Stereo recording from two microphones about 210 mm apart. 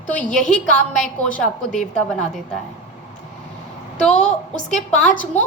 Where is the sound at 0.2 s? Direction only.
5° left (ahead or behind).